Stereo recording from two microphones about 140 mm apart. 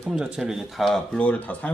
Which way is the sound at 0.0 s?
5° right (ahead or behind).